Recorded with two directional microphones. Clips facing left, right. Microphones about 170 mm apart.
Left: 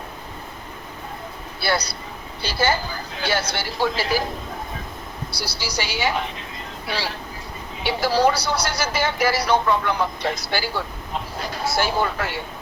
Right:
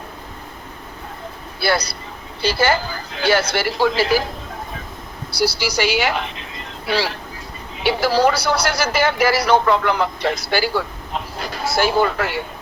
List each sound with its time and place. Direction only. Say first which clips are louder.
2.4 s speech: right 4 dB; 90° right
5.4 s speech: right 10 dB; 90° right
11.8 s speech: right 6 dB; 85° right